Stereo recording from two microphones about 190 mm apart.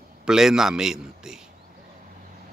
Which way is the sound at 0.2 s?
Centre (ahead or behind).